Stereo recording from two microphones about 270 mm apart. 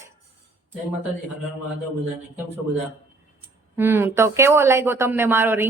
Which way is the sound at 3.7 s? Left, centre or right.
Centre.